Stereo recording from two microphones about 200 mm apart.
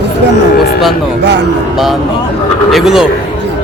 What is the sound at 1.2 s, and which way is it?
Speech, 60° right (ahead or behind).